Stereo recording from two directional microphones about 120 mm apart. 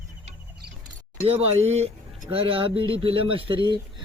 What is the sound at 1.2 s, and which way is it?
Speech, 60° right (ahead or behind).